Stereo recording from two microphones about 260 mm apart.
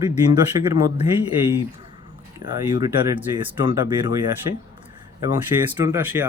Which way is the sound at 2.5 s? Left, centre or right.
Centre.